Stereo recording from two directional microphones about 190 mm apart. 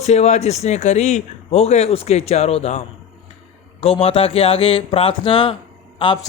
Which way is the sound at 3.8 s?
30° left (ahead or behind).